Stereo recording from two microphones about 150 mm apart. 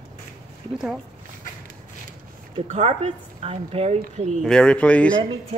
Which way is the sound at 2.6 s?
45° right (ahead or behind).